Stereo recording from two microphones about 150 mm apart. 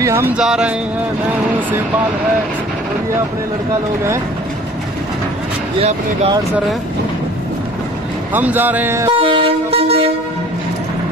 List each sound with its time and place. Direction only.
0.0 s speech: 20° right (ahead or behind)
0.4 s music: 5° right (ahead or behind)
8.3 s speech: 10° right (ahead or behind)
9.1 s vehicle: 35° right (ahead or behind)